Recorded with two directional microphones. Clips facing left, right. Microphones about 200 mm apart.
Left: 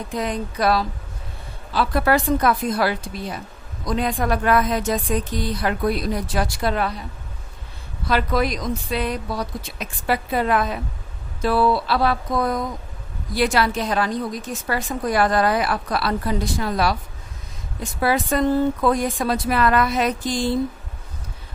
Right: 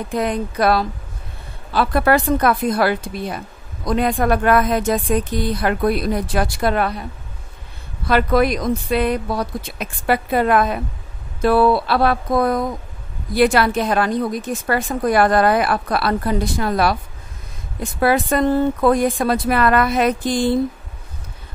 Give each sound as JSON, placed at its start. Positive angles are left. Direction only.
{"t": 0.1, "sound": "a woman's voice", "side_deg": -55}
{"t": 8.1, "sound": "a woman's voice", "side_deg": -55}
{"t": 18.0, "sound": "a woman's voice", "side_deg": -55}